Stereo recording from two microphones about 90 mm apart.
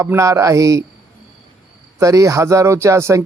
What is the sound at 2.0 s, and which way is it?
Speech, 40° right (ahead or behind).